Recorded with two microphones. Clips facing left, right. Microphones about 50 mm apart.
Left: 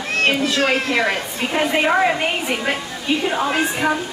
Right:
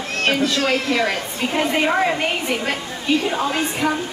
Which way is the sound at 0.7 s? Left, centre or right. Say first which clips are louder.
Left 1 dB; left.